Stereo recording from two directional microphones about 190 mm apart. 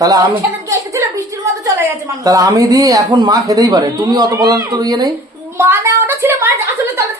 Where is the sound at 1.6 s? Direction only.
15° right (ahead or behind).